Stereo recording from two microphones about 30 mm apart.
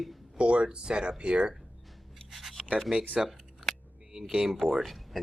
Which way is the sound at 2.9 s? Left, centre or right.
Centre.